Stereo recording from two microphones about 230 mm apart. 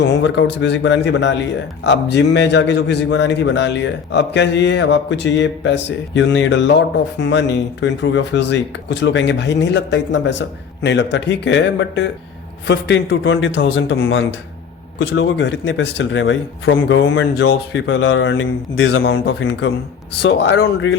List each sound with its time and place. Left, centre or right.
0.0 s a man's voice: left